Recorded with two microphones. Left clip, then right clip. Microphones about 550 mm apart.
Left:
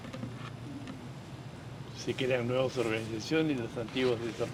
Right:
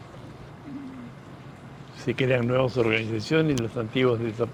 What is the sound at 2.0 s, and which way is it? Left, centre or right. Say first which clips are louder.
Speech: right 7 dB; right.